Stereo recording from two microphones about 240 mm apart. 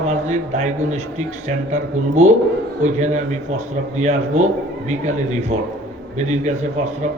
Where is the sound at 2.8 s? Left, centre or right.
Right.